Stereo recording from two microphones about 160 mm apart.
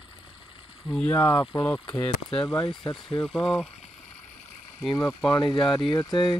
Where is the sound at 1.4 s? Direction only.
20° left (ahead or behind).